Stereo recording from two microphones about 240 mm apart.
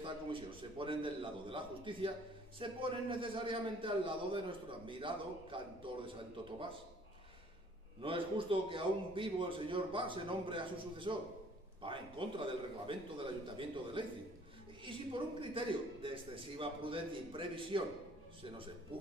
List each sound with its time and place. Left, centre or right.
0.0 s a man's voice: right
8.0 s a man's voice: right